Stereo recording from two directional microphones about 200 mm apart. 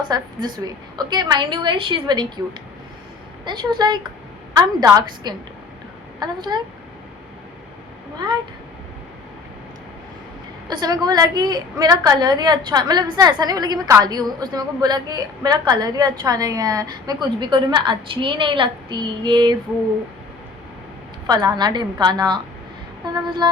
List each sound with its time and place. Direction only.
0.1 s a woman's voice: 20° right (ahead or behind)
3.4 s a woman's voice: 20° right (ahead or behind)
10.7 s a woman's voice: 20° right (ahead or behind)
21.2 s a woman's voice: 20° right (ahead or behind)
23.4 s a woman's voice: 20° right (ahead or behind)